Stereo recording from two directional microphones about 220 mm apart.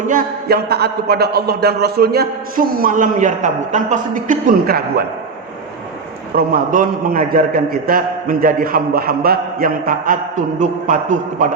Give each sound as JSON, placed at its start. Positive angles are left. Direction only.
{"t": 0.1, "sound": "a man's voice", "side_deg": -40}
{"t": 6.3, "sound": "a man's voice", "side_deg": -40}